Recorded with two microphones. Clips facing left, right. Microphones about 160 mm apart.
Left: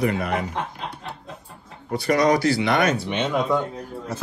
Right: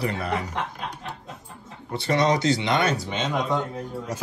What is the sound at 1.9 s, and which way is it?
Speech, 25° right (ahead or behind).